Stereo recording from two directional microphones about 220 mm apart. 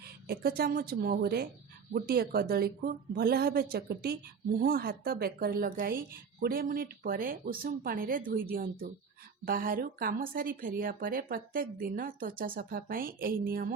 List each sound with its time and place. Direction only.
0.3 s a woman's voice: 45° right (ahead or behind)